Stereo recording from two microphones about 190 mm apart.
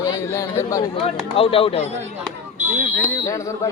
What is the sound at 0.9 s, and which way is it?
Speech, 30° left (ahead or behind).